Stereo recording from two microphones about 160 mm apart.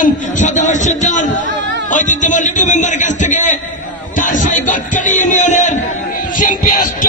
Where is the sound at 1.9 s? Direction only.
50° left (ahead or behind).